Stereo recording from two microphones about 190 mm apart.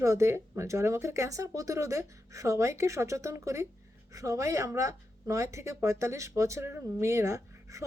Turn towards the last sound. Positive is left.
turn(degrees=-15)  # may be behind; listen again after turning